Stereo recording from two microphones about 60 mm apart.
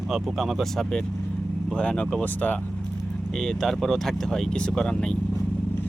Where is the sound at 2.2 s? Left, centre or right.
Left.